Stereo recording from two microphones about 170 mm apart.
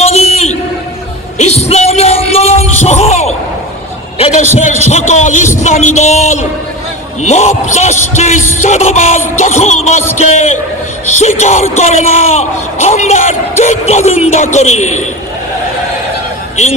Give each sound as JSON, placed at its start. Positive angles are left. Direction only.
{"t": 0.0, "sound": "a sound", "side_deg": 40}
{"t": 1.4, "sound": "music", "side_deg": 40}
{"t": 4.3, "sound": "a man's voice", "side_deg": 40}